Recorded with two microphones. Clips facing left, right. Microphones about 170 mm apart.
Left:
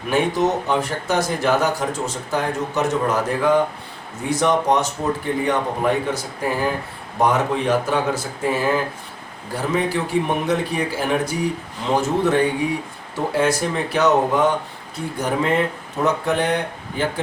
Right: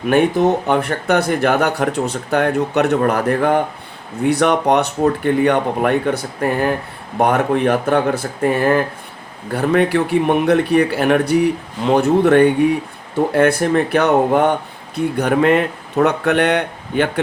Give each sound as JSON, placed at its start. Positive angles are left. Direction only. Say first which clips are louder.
{"t": 0.1, "sound": "speech", "louder": "right 5 dB", "side_deg": -60}